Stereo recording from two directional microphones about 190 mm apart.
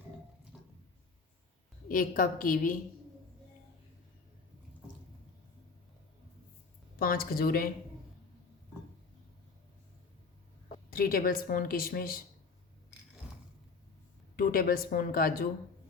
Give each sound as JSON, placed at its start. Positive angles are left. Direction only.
{"t": 0.5, "sound": "squish", "side_deg": -5}
{"t": 1.9, "sound": "speech", "side_deg": 45}
{"t": 7.0, "sound": "speech", "side_deg": 50}
{"t": 10.9, "sound": "speech", "side_deg": 50}
{"t": 14.3, "sound": "speech", "side_deg": 50}